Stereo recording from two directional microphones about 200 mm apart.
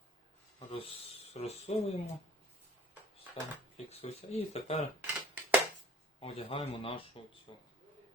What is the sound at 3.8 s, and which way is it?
Speech, 30° left (ahead or behind).